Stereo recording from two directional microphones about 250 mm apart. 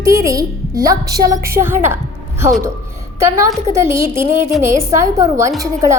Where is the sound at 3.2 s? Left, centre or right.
Centre.